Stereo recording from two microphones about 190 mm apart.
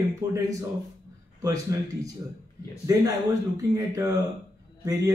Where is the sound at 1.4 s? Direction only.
15° right (ahead or behind).